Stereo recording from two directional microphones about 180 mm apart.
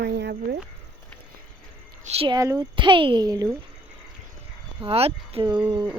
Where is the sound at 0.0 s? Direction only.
70° right (ahead or behind).